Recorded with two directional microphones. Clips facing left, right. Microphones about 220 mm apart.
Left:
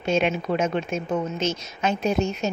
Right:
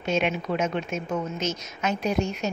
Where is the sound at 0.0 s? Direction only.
30° left (ahead or behind).